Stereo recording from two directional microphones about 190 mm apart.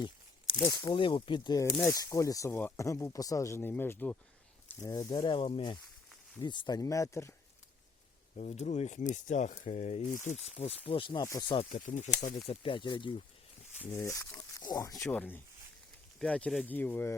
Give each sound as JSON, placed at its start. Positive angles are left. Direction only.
{"t": 0.6, "sound": "speech", "side_deg": 20}
{"t": 1.6, "sound": "speech", "side_deg": 0}
{"t": 1.9, "sound": "speech", "side_deg": 20}
{"t": 8.4, "sound": "speech", "side_deg": 35}
{"t": 11.7, "sound": "speech", "side_deg": 40}
{"t": 12.5, "sound": "speech", "side_deg": 25}
{"t": 13.8, "sound": "speech", "side_deg": 15}
{"t": 14.9, "sound": "speech", "side_deg": 5}